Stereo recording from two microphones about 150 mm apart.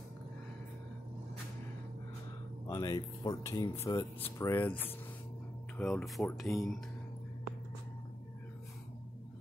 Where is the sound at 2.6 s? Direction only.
25° left (ahead or behind); by 6.2 s centre (ahead or behind).